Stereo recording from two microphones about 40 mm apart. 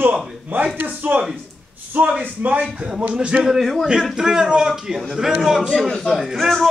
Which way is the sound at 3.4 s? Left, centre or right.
Centre.